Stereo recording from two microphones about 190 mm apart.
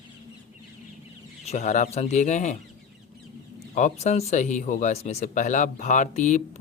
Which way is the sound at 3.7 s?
40° left (ahead or behind).